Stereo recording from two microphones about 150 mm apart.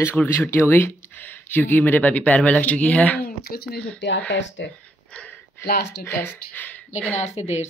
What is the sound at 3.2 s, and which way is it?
Speech, 85° left.